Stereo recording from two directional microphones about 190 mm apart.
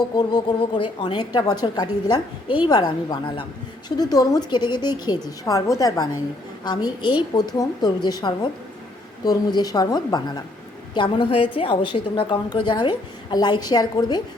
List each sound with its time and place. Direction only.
0.2 s a woman's voice: 20° left (ahead or behind)